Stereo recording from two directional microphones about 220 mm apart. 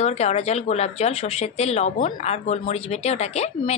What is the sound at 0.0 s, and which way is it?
Speech, 30° left (ahead or behind).